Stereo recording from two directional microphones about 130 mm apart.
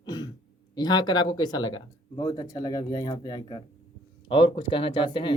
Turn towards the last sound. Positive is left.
turn(degrees=40)  # may be behind; listen again after turning